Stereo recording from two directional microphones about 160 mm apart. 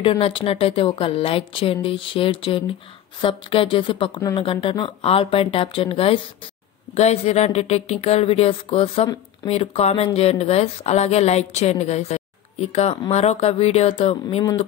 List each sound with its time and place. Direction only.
0.0 s a woman's voice: 35° left (ahead or behind)